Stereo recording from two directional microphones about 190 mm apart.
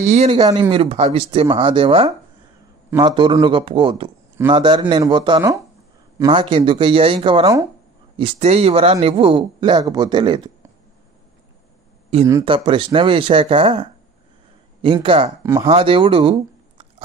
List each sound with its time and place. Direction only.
0.0 s speech: 35° right (ahead or behind)
12.4 s speech: 25° right (ahead or behind)